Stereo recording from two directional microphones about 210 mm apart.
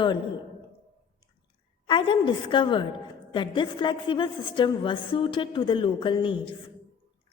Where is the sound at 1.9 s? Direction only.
25° left (ahead or behind).